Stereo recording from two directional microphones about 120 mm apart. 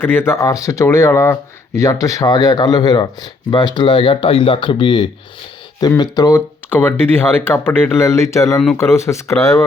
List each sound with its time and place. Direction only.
0.0 s speech: 20° left (ahead or behind); by 6.3 s 35° left (ahead or behind)
6.3 s speech: 20° left (ahead or behind)